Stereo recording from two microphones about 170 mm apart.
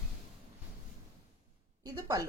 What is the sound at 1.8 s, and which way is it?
Speech, 20° right (ahead or behind).